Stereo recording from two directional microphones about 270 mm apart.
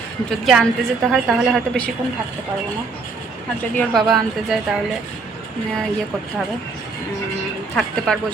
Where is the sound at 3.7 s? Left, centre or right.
Centre.